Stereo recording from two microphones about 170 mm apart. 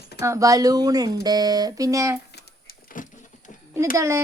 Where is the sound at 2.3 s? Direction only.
65° left (ahead or behind); by 3.5 s 50° left (ahead or behind).